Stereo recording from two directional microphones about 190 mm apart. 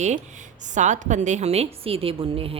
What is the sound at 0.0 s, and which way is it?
Speech, 40° right (ahead or behind).